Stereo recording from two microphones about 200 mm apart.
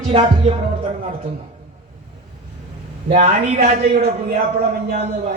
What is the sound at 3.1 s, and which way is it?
A man's voice, 35° right (ahead or behind).